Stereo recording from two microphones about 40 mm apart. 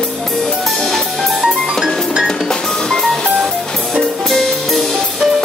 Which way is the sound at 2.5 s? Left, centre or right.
Centre.